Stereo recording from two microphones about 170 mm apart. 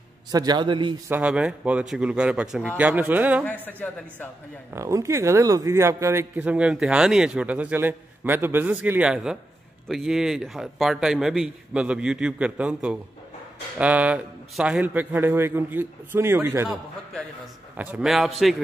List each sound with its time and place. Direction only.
0.3 s a man's voice: 25° right (ahead or behind)
1.0 s a man's voice: 10° right (ahead or behind)
3.4 s a man's voice: 10° left (ahead or behind)
4.7 s a man's voice: 15° right (ahead or behind)
17.7 s a man's voice: 5° right (ahead or behind)